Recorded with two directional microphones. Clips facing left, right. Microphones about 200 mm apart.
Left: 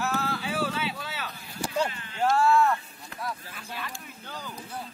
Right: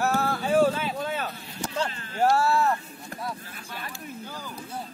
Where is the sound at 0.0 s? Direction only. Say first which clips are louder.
Right 4 dB; 50° right (ahead or behind).